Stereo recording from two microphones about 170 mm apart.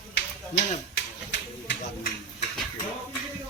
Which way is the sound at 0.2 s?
90° left.